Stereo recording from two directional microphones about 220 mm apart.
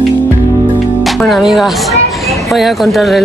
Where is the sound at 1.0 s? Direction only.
Centre (ahead or behind).